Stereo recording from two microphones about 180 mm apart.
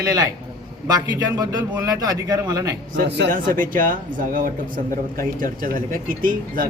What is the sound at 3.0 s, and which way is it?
Speech, 70° right (ahead or behind).